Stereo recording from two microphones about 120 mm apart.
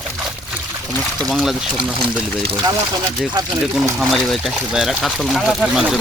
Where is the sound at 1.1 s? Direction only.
Centre (ahead or behind).